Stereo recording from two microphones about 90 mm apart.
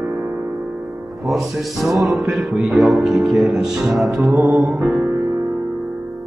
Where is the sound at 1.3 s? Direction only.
Centre (ahead or behind).